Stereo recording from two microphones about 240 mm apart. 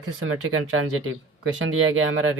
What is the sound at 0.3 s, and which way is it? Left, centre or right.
Speech, right.